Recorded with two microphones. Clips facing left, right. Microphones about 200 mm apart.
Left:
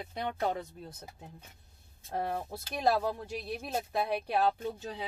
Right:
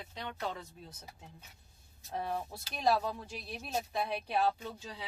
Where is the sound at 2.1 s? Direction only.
55° left (ahead or behind).